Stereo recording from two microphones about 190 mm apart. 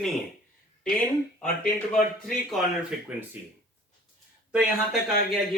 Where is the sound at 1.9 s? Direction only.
5° left (ahead or behind).